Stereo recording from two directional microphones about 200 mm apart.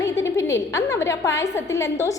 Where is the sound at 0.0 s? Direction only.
15° left (ahead or behind).